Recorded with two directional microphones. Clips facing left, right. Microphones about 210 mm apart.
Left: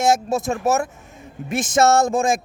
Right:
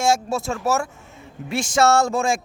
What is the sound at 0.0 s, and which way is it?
Speech, 20° left (ahead or behind).